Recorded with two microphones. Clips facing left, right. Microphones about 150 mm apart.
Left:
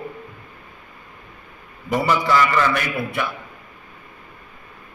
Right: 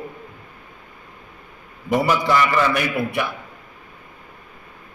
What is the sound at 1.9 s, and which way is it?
A man's voice, 15° right (ahead or behind).